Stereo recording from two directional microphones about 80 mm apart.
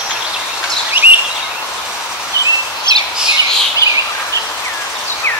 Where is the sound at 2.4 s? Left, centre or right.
Left.